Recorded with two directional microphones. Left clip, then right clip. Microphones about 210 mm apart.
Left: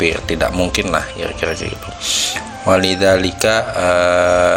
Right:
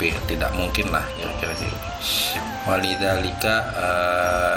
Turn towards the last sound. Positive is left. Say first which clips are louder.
# left 8 dB
turn(degrees=40)  # may be behind; listen again after turning